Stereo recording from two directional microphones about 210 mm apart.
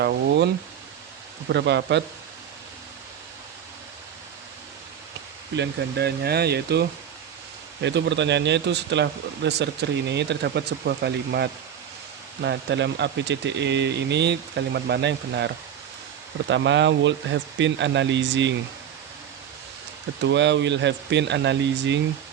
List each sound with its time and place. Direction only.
0.0 s speech: 50° right (ahead or behind)
5.5 s speech: 50° right (ahead or behind)
16.5 s speech: 60° right (ahead or behind)
20.2 s speech: 55° right (ahead or behind)